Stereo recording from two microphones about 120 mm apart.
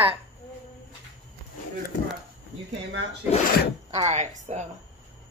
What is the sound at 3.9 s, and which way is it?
Speech, 65° right (ahead or behind).